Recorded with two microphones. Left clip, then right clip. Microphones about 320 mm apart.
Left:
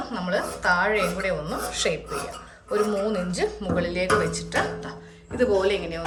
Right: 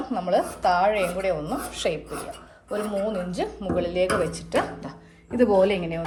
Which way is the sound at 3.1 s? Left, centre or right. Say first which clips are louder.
Left 2 dB; centre.